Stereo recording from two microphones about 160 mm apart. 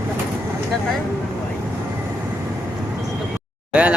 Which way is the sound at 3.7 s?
5° right (ahead or behind).